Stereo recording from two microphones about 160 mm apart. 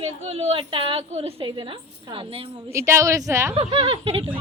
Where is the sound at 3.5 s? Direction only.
35° right (ahead or behind).